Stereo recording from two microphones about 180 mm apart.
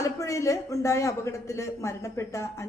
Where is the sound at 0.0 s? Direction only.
15° left (ahead or behind).